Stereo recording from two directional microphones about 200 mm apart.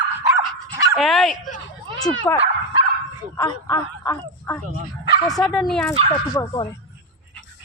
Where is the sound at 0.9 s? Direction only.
Centre (ahead or behind).